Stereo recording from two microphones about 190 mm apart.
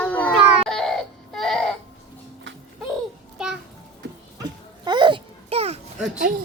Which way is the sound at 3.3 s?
5° right (ahead or behind).